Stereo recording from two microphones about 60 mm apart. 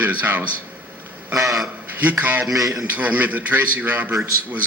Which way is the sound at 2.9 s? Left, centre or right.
Right.